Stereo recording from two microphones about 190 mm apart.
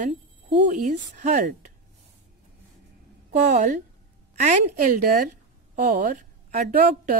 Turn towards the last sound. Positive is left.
turn(degrees=-45)  # may be behind; listen again after turning